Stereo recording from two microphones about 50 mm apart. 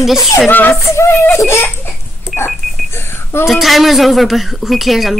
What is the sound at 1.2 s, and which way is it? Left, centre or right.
Speech, left.